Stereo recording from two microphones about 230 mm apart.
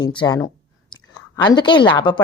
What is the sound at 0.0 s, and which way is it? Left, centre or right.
Speech, left.